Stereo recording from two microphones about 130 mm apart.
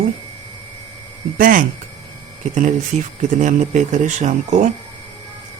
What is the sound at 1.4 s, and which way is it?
Speech, 90° right.